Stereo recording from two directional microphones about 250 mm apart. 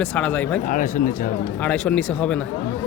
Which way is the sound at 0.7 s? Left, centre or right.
Left.